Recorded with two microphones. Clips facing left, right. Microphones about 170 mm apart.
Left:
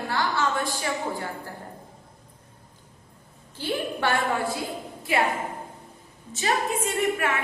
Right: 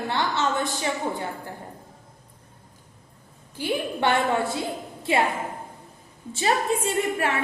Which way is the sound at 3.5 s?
15° right (ahead or behind).